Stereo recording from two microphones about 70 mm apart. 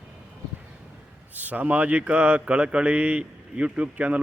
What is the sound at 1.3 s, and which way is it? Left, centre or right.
Speech, right.